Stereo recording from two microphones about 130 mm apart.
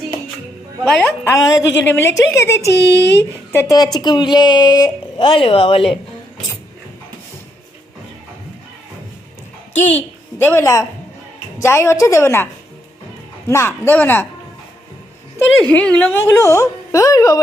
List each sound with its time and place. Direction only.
0.9 s speech: 5° left (ahead or behind)
1.2 s speech: 25° left (ahead or behind)
3.9 s speech: 30° left (ahead or behind)
9.7 s a child's voice: 60° left (ahead or behind)
10.3 s speech: 20° left (ahead or behind)
13.5 s speech: 20° left (ahead or behind)
15.7 s speech: 10° left (ahead or behind)
16.2 s speech: 25° left (ahead or behind)